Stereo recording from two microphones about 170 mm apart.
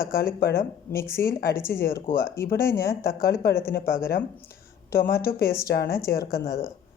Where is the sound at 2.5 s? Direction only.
15° left (ahead or behind).